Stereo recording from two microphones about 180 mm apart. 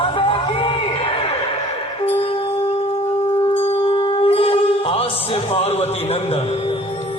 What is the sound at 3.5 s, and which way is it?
Music, 30° left (ahead or behind).